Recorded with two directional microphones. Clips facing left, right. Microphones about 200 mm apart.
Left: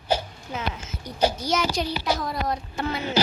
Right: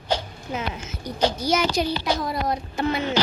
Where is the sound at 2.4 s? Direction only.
15° right (ahead or behind).